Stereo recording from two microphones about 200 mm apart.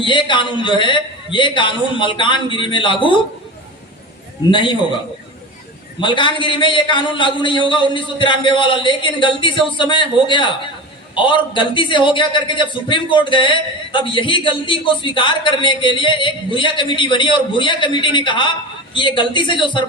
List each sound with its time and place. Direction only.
0.0 s a man's voice: 25° left (ahead or behind)
4.5 s a man's voice: 25° left (ahead or behind)
6.0 s a man's voice: 25° left (ahead or behind)